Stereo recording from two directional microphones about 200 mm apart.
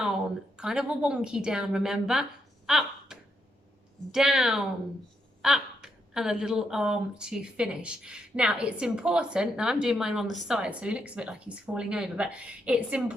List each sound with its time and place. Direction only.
0.5 s speech: 5° right (ahead or behind)
2.6 s a sound: centre (ahead or behind)
4.1 s speech: 5° right (ahead or behind)